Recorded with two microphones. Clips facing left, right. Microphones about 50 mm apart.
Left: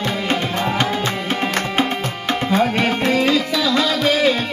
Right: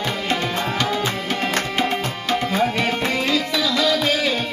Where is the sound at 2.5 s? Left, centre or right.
Left.